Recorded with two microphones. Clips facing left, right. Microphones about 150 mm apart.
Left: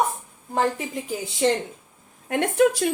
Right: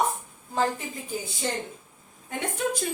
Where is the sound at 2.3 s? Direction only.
75° left (ahead or behind).